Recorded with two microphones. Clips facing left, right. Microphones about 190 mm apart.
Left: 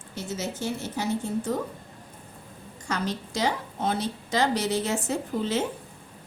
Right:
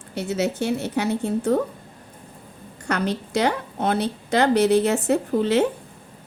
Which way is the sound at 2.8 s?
65° right (ahead or behind).